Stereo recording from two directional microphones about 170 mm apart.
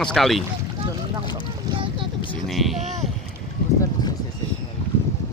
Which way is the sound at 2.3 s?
Centre (ahead or behind).